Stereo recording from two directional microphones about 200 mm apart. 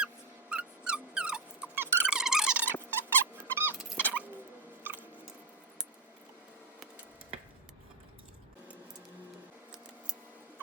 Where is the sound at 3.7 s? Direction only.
10° left (ahead or behind).